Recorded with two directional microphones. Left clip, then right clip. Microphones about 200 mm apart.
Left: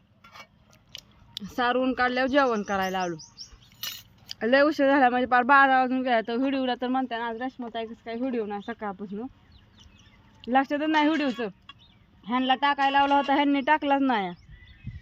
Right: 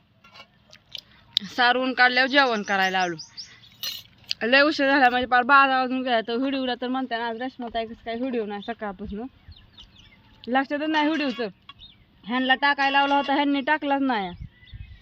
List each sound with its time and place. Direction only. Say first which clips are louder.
1.3 s speech: right 5 dB; 10° left (ahead or behind)
3.8 s a sound: right 4 dB; 30° right (ahead or behind)
4.3 s speech: right 2 dB; 5° left (ahead or behind)
10.4 s speech: even; 5° left (ahead or behind)
12.2 s speech: right 2 dB; centre (ahead or behind)